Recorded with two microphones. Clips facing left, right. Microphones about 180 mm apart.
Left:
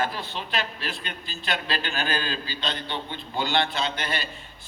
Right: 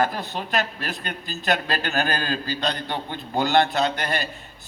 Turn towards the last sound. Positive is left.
turn(degrees=-45)  # may be behind; listen again after turning